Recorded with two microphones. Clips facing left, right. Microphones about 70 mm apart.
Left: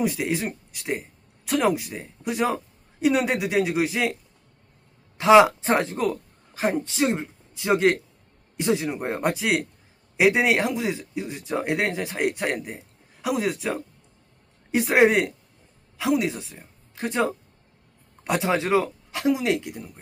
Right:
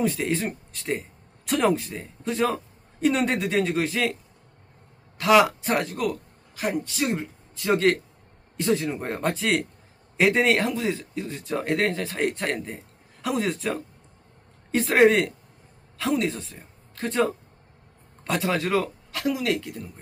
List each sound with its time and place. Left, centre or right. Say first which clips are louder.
0.0 s a woman's voice: even; centre